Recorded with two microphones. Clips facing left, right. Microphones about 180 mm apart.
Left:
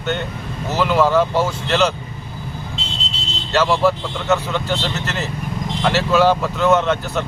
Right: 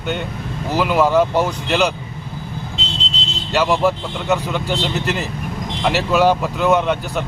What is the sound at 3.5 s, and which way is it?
Speech, 15° right (ahead or behind).